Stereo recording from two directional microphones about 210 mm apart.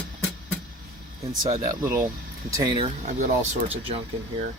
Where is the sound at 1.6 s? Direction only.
15° right (ahead or behind).